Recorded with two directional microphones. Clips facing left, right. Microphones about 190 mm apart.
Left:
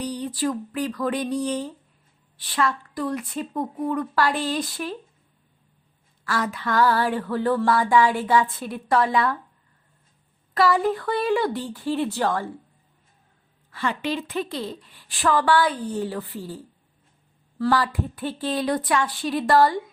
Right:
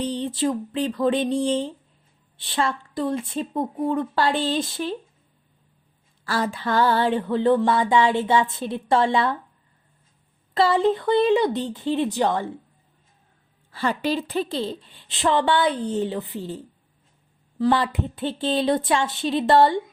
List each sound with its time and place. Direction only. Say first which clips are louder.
0.0 s music: right 2 dB; 25° right (ahead or behind)
6.2 s music: right 2 dB; 30° right (ahead or behind)
10.5 s music: right 2 dB; 25° right (ahead or behind)
13.7 s music: right 3 dB; 35° right (ahead or behind)
17.6 s music: right 2 dB; 20° right (ahead or behind)